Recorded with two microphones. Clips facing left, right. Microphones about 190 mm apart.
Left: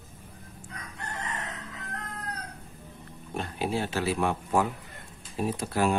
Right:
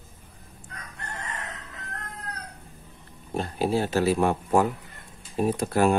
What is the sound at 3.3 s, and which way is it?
Speech, 35° right (ahead or behind).